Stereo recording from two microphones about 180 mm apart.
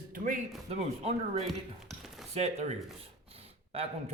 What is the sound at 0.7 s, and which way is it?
A man's voice, 35° right (ahead or behind).